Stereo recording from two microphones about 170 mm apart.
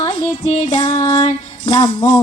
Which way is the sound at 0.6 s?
25° left (ahead or behind).